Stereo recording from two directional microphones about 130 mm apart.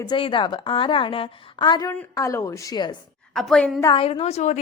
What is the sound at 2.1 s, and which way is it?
Speech, 25° left (ahead or behind).